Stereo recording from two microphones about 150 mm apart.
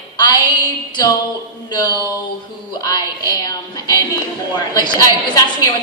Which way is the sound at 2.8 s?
25° left (ahead or behind).